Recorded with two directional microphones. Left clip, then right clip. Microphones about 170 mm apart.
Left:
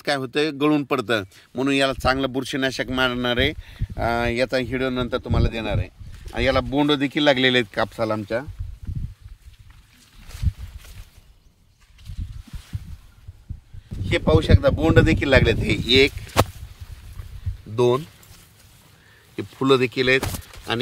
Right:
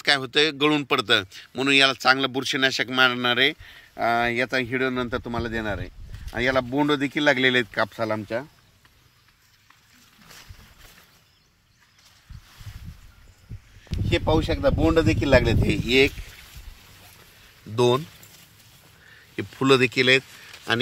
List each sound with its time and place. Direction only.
0.0 s speech: 60° left (ahead or behind)
6.9 s speech: 70° left (ahead or behind); by 8.5 s 55° left (ahead or behind)
14.2 s speech: 10° left (ahead or behind)
17.7 s speech: 5° left (ahead or behind)
19.3 s speech: centre (ahead or behind)